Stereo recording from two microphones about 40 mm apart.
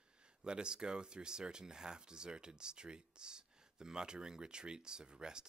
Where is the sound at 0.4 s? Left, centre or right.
Right.